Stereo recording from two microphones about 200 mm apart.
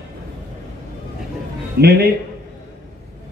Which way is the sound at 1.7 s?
50° right (ahead or behind).